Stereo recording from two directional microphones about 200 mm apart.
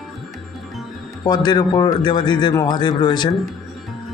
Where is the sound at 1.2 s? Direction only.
20° left (ahead or behind).